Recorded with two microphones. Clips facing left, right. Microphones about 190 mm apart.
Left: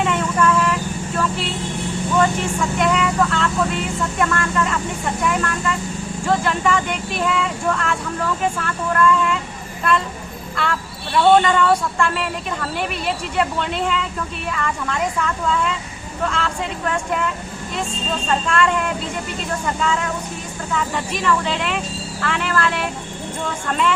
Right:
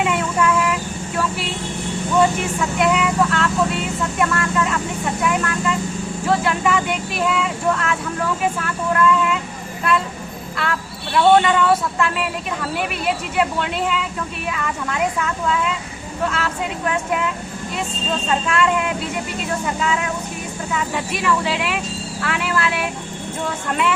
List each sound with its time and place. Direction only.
0.0 s vehicle: 10° right (ahead or behind)
2.6 s speech: 5° right (ahead or behind)
10.6 s speech: centre (ahead or behind)
18.3 s speech: 5° right (ahead or behind)